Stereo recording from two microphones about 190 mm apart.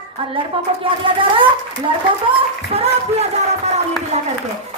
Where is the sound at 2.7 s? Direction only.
35° right (ahead or behind).